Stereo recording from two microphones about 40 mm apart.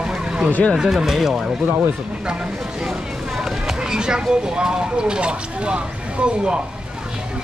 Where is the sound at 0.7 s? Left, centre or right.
Centre.